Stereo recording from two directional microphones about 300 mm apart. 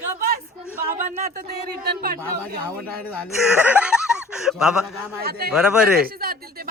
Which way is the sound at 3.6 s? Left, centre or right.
Centre.